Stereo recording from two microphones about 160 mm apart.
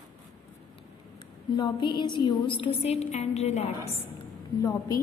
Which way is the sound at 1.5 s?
25° left (ahead or behind).